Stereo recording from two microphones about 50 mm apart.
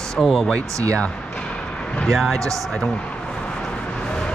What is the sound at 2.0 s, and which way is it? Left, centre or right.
Speech, centre.